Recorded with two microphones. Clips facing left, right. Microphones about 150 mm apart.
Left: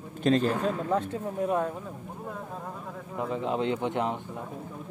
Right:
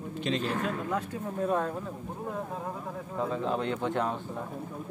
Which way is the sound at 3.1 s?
20° left (ahead or behind).